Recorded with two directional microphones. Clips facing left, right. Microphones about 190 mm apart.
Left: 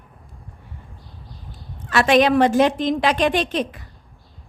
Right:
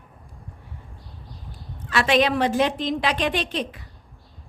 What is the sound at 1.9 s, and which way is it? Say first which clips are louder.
A woman's voice: left 5 dB; 50° left (ahead or behind).